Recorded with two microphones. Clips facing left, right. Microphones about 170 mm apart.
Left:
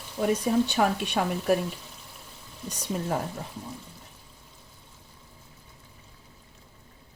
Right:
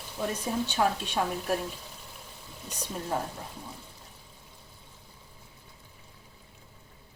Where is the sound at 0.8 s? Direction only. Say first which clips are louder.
Left 2 dB; 70° left (ahead or behind).